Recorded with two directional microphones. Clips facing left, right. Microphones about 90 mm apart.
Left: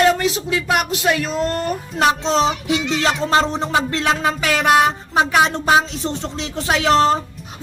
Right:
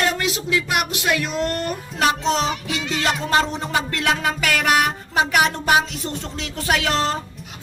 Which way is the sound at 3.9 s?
25° left (ahead or behind).